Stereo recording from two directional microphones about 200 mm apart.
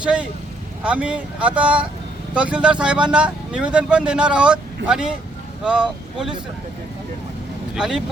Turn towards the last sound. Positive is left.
turn(degrees=-5)  # may be behind; listen again after turning